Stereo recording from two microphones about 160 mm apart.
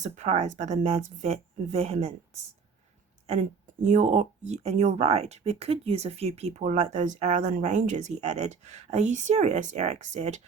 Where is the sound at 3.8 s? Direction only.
50° right (ahead or behind).